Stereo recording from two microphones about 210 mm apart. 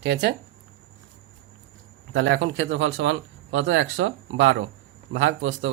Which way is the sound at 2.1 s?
60° right (ahead or behind).